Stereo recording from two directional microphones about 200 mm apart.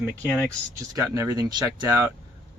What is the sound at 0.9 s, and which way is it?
Speech, 15° right (ahead or behind).